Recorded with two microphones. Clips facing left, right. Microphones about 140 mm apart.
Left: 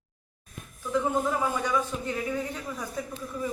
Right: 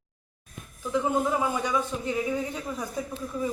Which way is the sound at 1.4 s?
15° right (ahead or behind).